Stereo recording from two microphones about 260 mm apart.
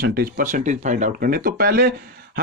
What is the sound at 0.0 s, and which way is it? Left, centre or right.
A man's voice, right.